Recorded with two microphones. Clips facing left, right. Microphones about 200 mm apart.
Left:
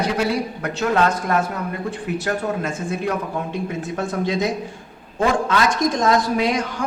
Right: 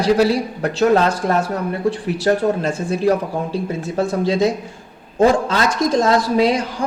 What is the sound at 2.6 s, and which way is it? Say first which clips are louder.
A man's voice: right 6 dB; 35° right (ahead or behind).